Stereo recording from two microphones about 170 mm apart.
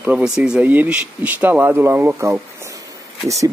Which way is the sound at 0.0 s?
5° right (ahead or behind).